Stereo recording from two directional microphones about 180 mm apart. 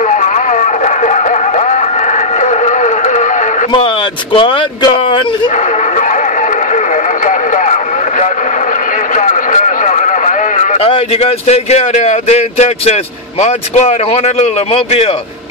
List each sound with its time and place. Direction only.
0.1 s a sound: 45° left (ahead or behind)
2.4 s music: 40° left (ahead or behind)
3.7 s speech: 25° left (ahead or behind)
7.2 s radio: 45° left (ahead or behind)
9.1 s a sound: 45° left (ahead or behind)
10.9 s speech: 35° left (ahead or behind)